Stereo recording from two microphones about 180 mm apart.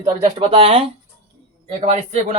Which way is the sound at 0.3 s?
35° right (ahead or behind).